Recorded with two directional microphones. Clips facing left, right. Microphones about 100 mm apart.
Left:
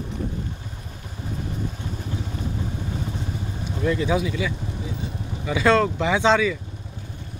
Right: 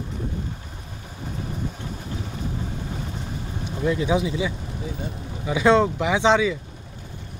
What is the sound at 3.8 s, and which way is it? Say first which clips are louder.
Speech: even; 10° right (ahead or behind).